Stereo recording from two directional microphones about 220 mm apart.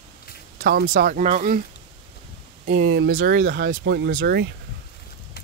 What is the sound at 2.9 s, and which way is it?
Speech, 50° right (ahead or behind).